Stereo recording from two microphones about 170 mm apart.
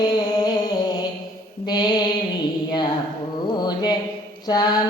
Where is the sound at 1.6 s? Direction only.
25° left (ahead or behind).